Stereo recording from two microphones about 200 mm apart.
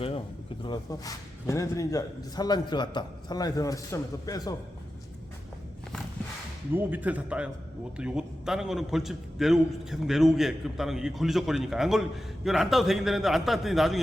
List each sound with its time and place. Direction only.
0.6 s a man's voice: 20° left (ahead or behind)
6.7 s a man's voice: 10° right (ahead or behind)